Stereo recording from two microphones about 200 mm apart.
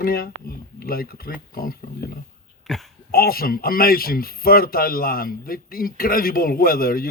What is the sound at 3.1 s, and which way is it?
Speech, 50° left (ahead or behind).